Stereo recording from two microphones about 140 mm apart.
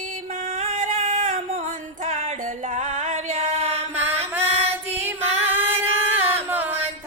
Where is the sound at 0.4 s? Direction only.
60° right (ahead or behind).